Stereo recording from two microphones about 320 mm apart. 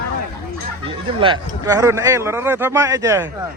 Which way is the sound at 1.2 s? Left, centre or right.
Centre.